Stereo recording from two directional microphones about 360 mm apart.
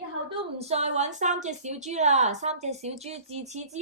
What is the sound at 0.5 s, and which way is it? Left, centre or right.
A woman's voice, centre.